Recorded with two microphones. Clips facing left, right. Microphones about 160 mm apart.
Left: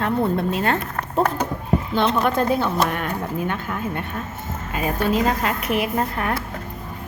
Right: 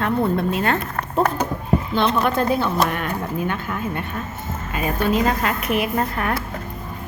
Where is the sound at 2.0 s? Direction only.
45° left (ahead or behind); by 6.4 s 25° left (ahead or behind).